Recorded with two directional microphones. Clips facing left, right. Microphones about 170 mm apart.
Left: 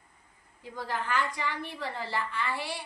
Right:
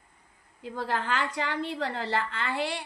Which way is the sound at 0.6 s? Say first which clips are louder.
Right 4 dB; 90° right.